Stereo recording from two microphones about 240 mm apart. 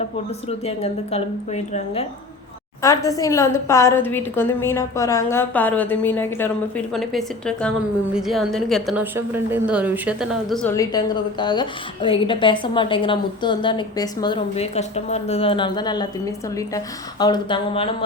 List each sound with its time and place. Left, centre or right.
0.4 s a woman's voice: left
2.8 s a woman's voice: centre